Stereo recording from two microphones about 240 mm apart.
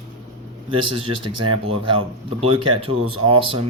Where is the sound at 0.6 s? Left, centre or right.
Right.